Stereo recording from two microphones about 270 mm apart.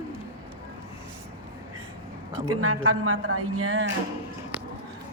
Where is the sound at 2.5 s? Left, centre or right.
Right.